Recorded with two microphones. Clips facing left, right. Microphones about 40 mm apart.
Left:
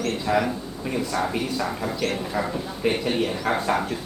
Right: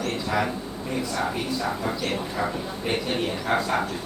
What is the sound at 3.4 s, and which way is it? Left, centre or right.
Speech, left.